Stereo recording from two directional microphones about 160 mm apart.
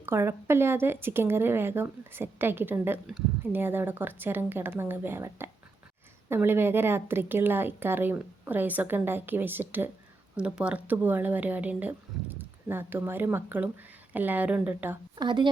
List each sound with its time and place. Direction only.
0.0 s speech: 15° right (ahead or behind)
15.1 s speech: 30° right (ahead or behind)